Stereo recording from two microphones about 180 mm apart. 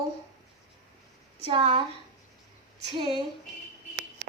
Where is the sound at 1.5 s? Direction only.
30° right (ahead or behind).